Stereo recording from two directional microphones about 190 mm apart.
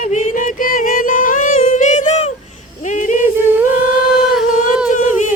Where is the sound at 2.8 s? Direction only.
40° left (ahead or behind).